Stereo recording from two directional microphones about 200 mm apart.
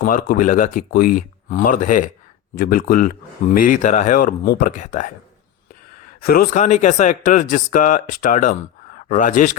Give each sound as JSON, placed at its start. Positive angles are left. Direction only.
{"t": 0.0, "sound": "speech", "side_deg": 45}
{"t": 6.2, "sound": "speech", "side_deg": 45}